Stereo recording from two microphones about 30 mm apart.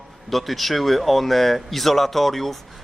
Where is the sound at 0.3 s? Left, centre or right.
Centre.